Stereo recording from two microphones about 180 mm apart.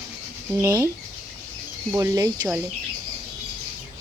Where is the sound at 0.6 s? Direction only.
20° right (ahead or behind).